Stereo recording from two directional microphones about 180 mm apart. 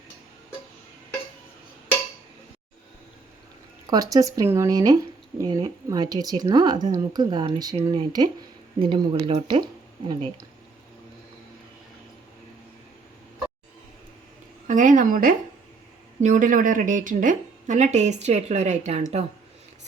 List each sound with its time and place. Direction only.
3.8 s speech: 20° right (ahead or behind)
14.7 s a woman's voice: 45° right (ahead or behind)